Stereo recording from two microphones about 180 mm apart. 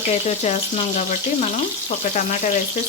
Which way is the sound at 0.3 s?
40° left (ahead or behind).